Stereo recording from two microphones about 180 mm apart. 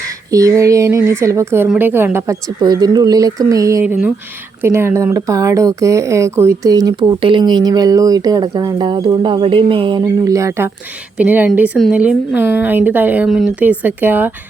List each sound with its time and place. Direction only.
0.3 s speech: 20° right (ahead or behind)